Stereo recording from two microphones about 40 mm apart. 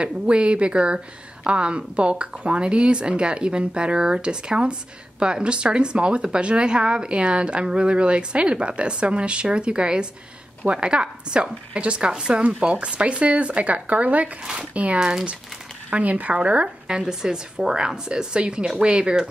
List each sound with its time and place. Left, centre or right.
0.0 s speech: right
14.4 s speech: right
14.7 s speech: right
16.6 s speech: centre